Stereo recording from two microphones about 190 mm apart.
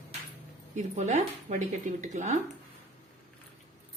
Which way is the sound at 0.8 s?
40° right (ahead or behind).